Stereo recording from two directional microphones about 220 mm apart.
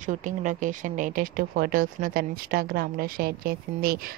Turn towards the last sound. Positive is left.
turn(degrees=-45)  # may be behind; listen again after turning